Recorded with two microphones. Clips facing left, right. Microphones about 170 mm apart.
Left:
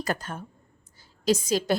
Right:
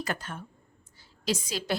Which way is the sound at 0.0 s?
40° left (ahead or behind).